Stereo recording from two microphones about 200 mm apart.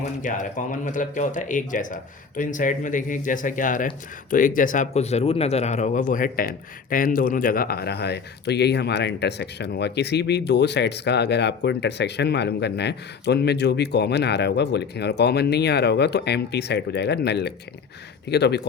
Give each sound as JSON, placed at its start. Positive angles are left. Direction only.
{"t": 0.0, "sound": "speech", "side_deg": 40}